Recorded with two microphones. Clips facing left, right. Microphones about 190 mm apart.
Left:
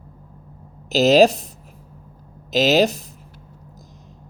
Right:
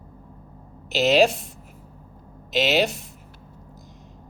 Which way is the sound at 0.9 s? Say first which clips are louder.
Left 5 dB; 40° left (ahead or behind).